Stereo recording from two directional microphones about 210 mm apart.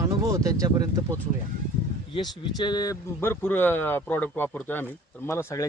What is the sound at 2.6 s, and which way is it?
Speech, 20° left (ahead or behind).